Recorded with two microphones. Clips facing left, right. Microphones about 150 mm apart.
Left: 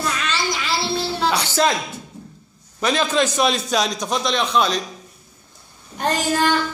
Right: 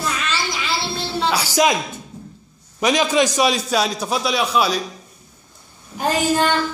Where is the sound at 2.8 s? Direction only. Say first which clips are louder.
Right 2 dB; 10° right (ahead or behind).